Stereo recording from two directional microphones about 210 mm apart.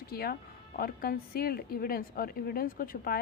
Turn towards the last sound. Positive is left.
turn(degrees=45)  # may be behind; listen again after turning